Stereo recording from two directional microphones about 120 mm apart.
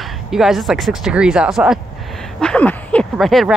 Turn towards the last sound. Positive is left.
turn(degrees=0)  # may be behind; listen again after turning